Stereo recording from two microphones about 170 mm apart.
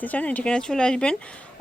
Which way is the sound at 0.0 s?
10° left (ahead or behind).